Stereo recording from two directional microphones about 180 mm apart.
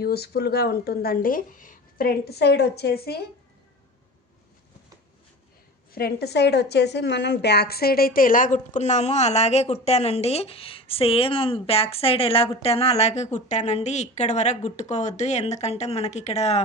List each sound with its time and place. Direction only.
0.0 s speech: 60° left (ahead or behind)
5.9 s a woman's voice: 65° left (ahead or behind); by 16.6 s 35° left (ahead or behind)